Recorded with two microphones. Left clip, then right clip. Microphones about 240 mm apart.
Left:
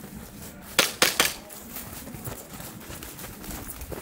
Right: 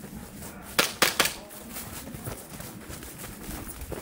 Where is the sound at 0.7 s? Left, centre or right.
Centre.